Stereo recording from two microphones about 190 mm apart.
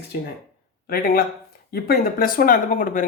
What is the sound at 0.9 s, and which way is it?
Speech, 50° left (ahead or behind).